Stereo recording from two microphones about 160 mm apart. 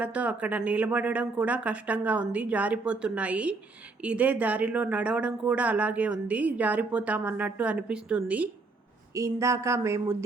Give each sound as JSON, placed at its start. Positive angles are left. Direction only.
{"t": 0.0, "sound": "speech", "side_deg": -10}
{"t": 9.1, "sound": "speech", "side_deg": -20}